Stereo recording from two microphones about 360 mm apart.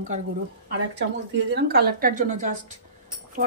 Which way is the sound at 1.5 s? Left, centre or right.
Right.